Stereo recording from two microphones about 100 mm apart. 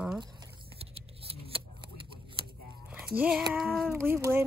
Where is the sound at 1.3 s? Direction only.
70° right (ahead or behind).